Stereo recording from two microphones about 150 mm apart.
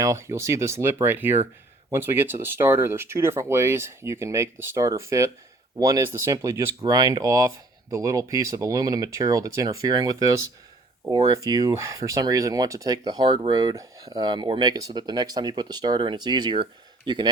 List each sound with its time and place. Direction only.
0.0 s speech: 20° right (ahead or behind)
11.6 s speech: 20° right (ahead or behind)